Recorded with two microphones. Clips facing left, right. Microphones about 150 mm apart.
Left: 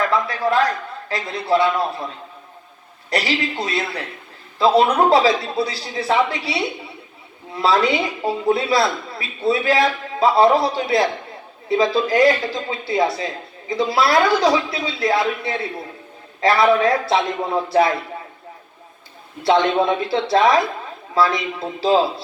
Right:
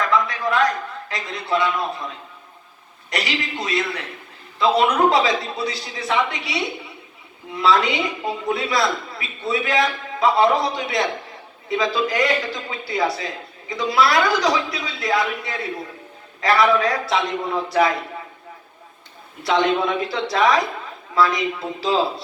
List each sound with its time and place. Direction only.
0.1 s a sound: 30° left (ahead or behind)
3.1 s speech: 30° left (ahead or behind)
19.4 s speech: 25° left (ahead or behind)